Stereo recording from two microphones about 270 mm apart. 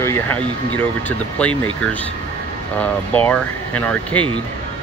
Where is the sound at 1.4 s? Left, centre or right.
Centre.